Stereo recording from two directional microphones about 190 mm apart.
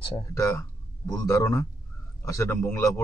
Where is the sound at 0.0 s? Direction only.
25° left (ahead or behind).